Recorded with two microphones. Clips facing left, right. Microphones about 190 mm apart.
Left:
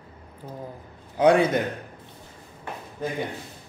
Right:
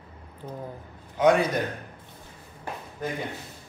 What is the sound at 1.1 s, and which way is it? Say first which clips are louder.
Speech: left 3 dB; 30° left (ahead or behind).